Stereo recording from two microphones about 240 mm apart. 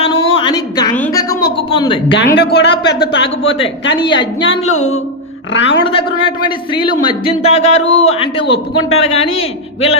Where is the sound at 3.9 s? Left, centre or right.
Centre.